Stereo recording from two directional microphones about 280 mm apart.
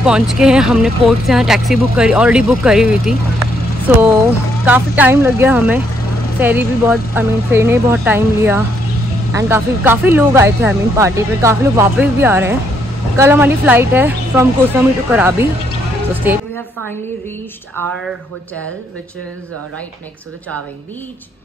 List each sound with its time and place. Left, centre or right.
0.0 s speech: centre
17.7 s speech: centre